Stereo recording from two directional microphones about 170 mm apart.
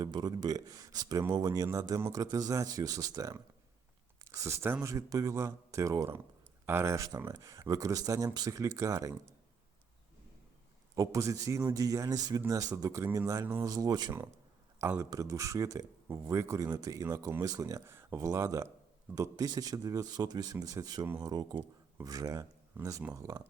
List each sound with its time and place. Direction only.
0.0 s speech: 25° right (ahead or behind)
10.9 s speech: 20° right (ahead or behind)